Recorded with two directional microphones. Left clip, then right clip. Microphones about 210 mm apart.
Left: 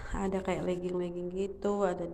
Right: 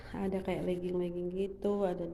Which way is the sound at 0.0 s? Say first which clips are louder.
Left 3 dB; 10° right (ahead or behind).